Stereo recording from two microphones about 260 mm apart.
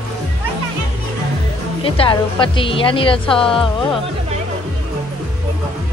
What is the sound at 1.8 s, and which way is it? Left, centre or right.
A woman's voice, centre.